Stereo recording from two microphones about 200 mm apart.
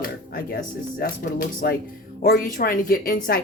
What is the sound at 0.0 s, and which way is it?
A woman's voice, 45° left (ahead or behind).